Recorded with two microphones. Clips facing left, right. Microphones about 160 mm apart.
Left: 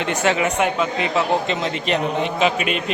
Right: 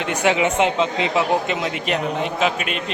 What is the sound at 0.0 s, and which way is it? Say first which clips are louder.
A man's voice: right 1 dB; 10° right (ahead or behind).